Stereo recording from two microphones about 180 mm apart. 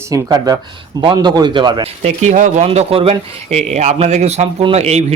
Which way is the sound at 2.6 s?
30° right (ahead or behind).